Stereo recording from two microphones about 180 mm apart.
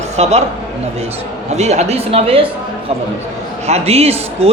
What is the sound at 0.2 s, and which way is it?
Speech, 35° right (ahead or behind).